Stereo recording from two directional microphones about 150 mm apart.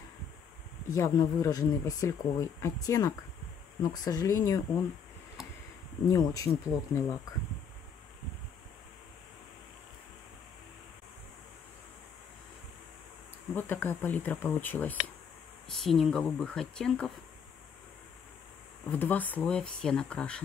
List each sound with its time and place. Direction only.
0.9 s speech: 20° left (ahead or behind)
6.0 s speech: 25° left (ahead or behind)
13.6 s speech: 15° left (ahead or behind)
18.9 s speech: 10° left (ahead or behind)